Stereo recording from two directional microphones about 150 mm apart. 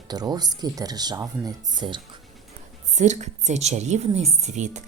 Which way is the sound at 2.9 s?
50° right (ahead or behind).